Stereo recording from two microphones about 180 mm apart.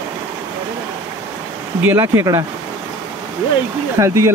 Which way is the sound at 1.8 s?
15° right (ahead or behind).